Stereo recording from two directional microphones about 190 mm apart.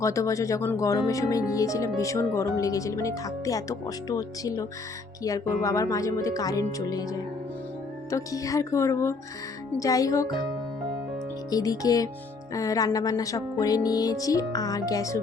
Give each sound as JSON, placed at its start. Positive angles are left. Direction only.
{"t": 0.0, "sound": "speech", "side_deg": 15}
{"t": 11.5, "sound": "music", "side_deg": 20}